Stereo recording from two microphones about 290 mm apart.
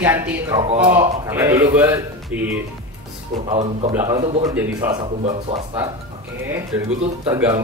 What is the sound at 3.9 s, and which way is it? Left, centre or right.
A woman's voice, centre.